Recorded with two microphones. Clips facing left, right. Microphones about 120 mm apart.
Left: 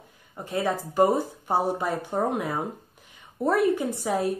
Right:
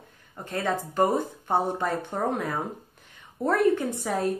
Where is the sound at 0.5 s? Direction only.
5° left (ahead or behind).